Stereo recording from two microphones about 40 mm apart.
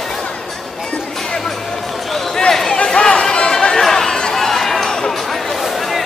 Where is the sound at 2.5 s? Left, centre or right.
Centre.